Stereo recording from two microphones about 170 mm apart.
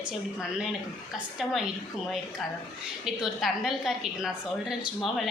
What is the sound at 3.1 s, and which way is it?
A woman's voice, centre (ahead or behind).